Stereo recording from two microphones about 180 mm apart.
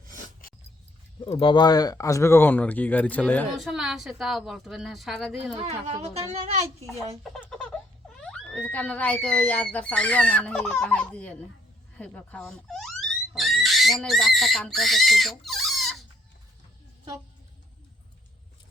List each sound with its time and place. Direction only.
0.0 s a sound: 50° right (ahead or behind)
1.2 s speech: 30° left (ahead or behind); by 5.5 s centre (ahead or behind)
5.6 s speech: 35° right (ahead or behind)
6.8 s speech: centre (ahead or behind)